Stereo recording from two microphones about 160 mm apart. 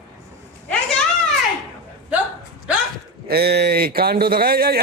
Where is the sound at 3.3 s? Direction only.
85° right.